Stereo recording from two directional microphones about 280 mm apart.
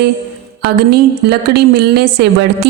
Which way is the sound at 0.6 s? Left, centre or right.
Right.